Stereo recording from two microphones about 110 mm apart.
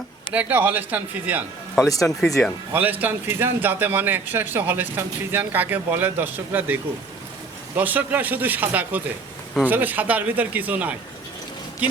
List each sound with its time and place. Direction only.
0.3 s a man's voice: 15° right (ahead or behind)
2.0 s speech: 5° left (ahead or behind)
2.7 s a man's voice: 15° right (ahead or behind)
7.8 s a man's voice: 15° right (ahead or behind)